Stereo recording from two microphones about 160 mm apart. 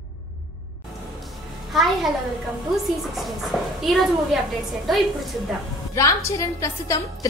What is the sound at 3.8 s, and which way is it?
Speech, centre (ahead or behind).